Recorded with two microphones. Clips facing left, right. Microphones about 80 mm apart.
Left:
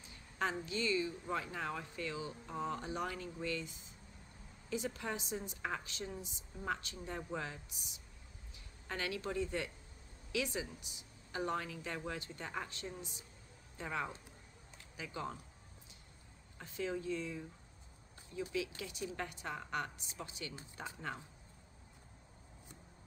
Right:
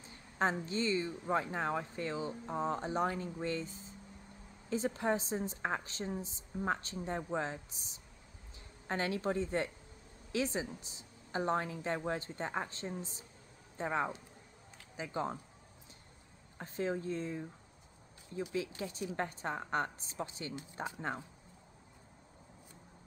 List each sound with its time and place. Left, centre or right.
0.7 s a woman's voice: right
16.5 s a woman's voice: right